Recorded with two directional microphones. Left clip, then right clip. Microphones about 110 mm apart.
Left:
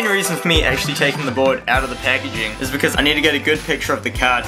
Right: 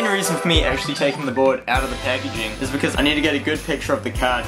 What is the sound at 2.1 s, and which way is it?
Speech, 25° left (ahead or behind).